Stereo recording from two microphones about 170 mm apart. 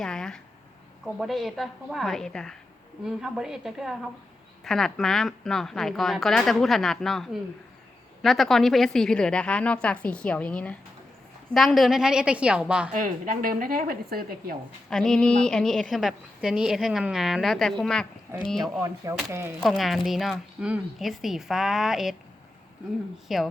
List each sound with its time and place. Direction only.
0.0 s a woman's voice: 5° left (ahead or behind)
12.9 s speech: 55° right (ahead or behind)
14.8 s a woman's voice: 5° left (ahead or behind)
19.3 s speech: 15° right (ahead or behind)
19.6 s a woman's voice: centre (ahead or behind)
23.1 s a woman's voice: centre (ahead or behind)